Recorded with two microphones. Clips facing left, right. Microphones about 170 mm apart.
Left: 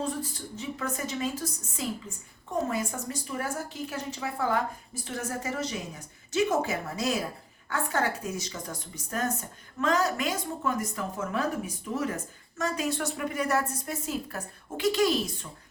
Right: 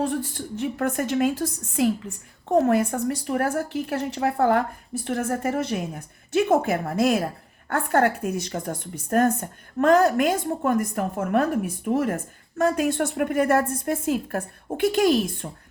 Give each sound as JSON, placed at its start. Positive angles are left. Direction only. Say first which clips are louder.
{"t": 0.3, "sound": "a woman's voice", "louder": "right 9 dB", "side_deg": -60}